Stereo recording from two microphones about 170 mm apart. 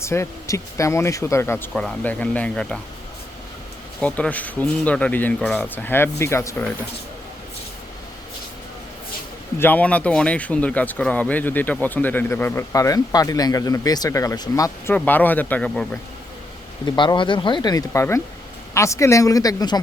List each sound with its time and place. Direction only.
0.0 s speech: 15° left (ahead or behind)
4.0 s speech: 10° left (ahead or behind)
9.6 s speech: 10° left (ahead or behind)
14.9 s speech: 10° left (ahead or behind)
16.8 s speech: 25° left (ahead or behind)